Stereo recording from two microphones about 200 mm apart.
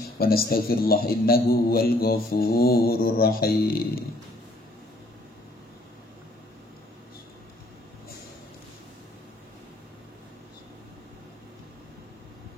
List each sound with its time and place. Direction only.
0.2 s speech: 50° left (ahead or behind)